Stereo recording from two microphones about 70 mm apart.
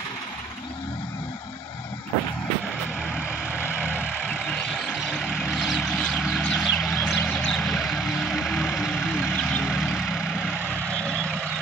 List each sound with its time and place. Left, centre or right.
3.5 s vehicle: right
4.5 s vehicle: centre
5.6 s vehicle: centre
5.9 s vehicle: centre